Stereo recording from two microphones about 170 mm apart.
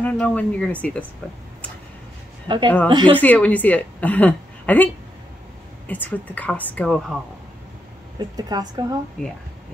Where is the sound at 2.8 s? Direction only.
30° right (ahead or behind).